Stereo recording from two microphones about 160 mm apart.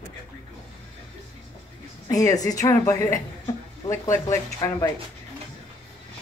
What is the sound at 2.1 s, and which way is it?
A woman's voice, 20° left (ahead or behind).